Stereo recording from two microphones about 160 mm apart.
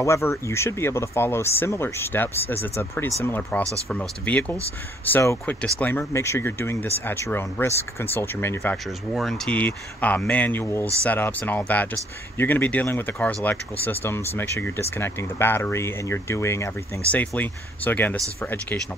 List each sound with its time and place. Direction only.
0.0 s speech: 15° left (ahead or behind)
9.1 s speech: centre (ahead or behind)